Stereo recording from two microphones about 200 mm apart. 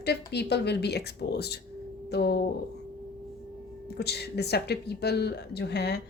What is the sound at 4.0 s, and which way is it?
A woman's voice, 55° left (ahead or behind).